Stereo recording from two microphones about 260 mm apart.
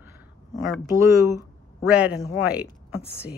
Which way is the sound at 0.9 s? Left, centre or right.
Centre.